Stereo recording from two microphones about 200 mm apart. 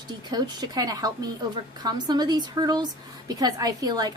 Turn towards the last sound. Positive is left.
turn(degrees=-20)  # may be behind; listen again after turning